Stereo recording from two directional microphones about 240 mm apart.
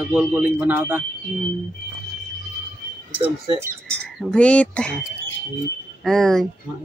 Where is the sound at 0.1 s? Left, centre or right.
Centre.